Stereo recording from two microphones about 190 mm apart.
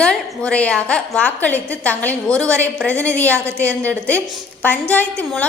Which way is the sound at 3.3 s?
10° right (ahead or behind).